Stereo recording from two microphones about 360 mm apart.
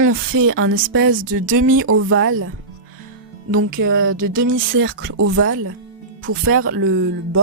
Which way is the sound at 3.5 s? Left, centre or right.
Right.